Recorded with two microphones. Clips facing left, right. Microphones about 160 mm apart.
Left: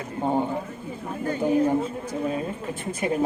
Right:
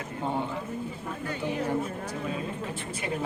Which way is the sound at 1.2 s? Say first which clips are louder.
Left 10 dB; 45° left (ahead or behind).